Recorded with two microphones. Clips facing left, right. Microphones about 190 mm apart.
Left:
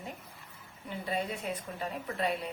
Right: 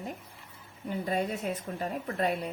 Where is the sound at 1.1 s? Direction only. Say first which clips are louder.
Right 3 dB; 45° right (ahead or behind).